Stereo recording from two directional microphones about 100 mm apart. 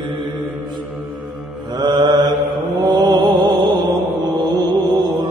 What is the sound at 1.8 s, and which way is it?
Mantra, 45° right (ahead or behind).